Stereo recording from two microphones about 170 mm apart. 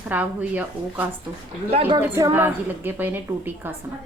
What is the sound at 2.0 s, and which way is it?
A woman's voice, 15° right (ahead or behind).